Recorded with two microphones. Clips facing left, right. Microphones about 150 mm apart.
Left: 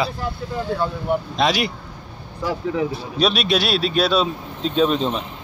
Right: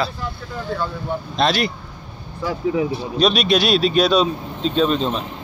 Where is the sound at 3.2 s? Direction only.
5° left (ahead or behind).